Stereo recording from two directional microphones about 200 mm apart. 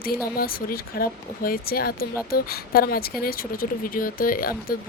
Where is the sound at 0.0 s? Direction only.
50° left (ahead or behind).